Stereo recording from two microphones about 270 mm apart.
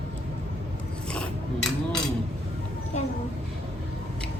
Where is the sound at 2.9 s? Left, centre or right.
Left.